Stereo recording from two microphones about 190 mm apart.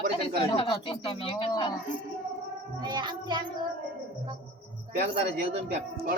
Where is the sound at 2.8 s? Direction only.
25° right (ahead or behind).